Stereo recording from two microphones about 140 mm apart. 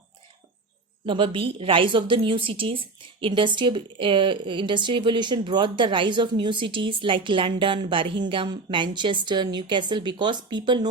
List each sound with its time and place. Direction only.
1.0 s a woman's voice: 35° right (ahead or behind)